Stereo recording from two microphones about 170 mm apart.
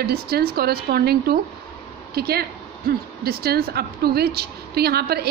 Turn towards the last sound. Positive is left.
turn(degrees=-65)  # may be behind; listen again after turning